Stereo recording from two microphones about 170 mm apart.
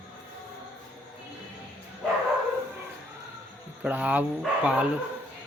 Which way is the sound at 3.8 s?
10° right (ahead or behind).